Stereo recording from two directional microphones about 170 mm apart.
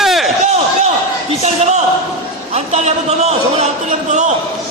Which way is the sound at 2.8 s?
40° right (ahead or behind).